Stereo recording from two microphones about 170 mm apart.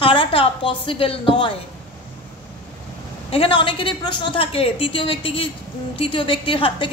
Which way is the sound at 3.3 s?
30° left (ahead or behind).